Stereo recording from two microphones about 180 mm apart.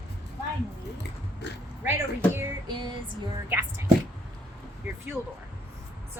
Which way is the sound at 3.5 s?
10° right (ahead or behind).